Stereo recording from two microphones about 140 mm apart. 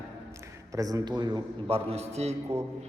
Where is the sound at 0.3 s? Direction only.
20° right (ahead or behind).